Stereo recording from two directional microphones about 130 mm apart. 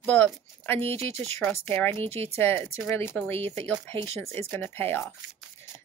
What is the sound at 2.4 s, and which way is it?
Speech, 20° left (ahead or behind).